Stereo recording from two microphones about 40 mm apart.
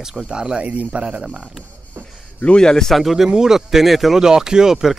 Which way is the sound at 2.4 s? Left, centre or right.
Left.